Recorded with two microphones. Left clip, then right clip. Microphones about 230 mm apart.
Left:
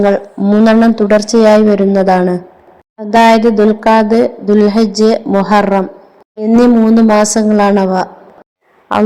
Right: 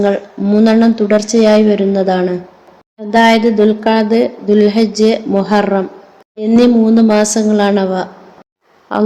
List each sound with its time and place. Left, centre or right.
0.0 s a woman's voice: centre